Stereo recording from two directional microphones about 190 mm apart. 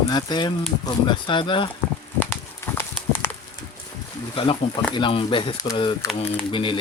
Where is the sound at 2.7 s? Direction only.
10° left (ahead or behind).